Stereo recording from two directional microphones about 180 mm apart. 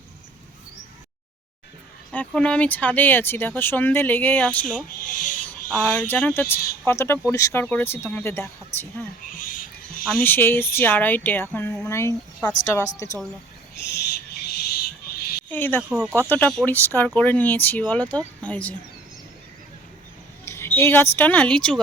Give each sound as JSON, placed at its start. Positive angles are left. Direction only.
{"t": 2.1, "sound": "speech", "side_deg": 5}
{"t": 5.0, "sound": "speech", "side_deg": 50}
{"t": 5.8, "sound": "speech", "side_deg": 5}
{"t": 10.1, "sound": "speech", "side_deg": 10}
{"t": 13.9, "sound": "owl", "side_deg": 60}
{"t": 15.4, "sound": "speech", "side_deg": 10}
{"t": 20.4, "sound": "speech", "side_deg": 15}